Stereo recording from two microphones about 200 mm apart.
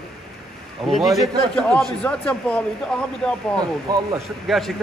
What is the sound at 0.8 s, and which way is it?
A man's voice, centre (ahead or behind).